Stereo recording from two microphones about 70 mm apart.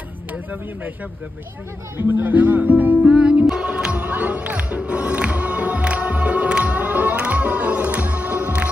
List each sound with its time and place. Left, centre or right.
0.3 s speech: right
2.0 s speech: right
3.1 s music: centre